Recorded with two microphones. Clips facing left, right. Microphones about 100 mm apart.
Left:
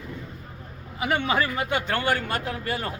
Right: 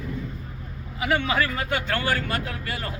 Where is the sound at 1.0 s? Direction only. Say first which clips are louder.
Even; 30° left (ahead or behind).